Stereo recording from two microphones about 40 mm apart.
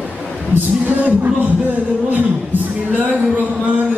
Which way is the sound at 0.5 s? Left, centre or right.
Right.